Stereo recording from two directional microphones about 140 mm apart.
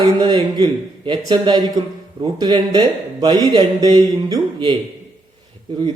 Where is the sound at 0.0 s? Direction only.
30° right (ahead or behind).